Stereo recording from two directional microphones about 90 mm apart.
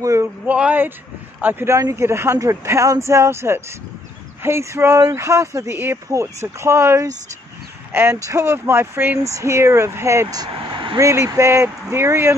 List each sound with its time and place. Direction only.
0.0 s speech: 35° right (ahead or behind)
0.5 s speech: 15° right (ahead or behind)
9.2 s speech: 35° right (ahead or behind)
10.2 s speech: 45° right (ahead or behind)
10.6 s vehicle: 65° right (ahead or behind)
11.0 s speech: 35° right (ahead or behind)